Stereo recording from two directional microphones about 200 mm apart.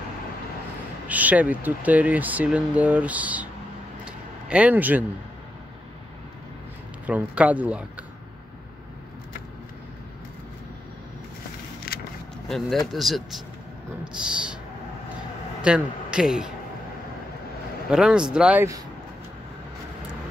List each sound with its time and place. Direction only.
1.0 s speech: 5° right (ahead or behind)
4.0 s a sound: 5° right (ahead or behind)
7.1 s speech: 5° right (ahead or behind)
11.9 s vehicle: 50° left (ahead or behind)
12.4 s speech: centre (ahead or behind)
15.6 s speech: 5° right (ahead or behind)
17.8 s speech: 5° right (ahead or behind)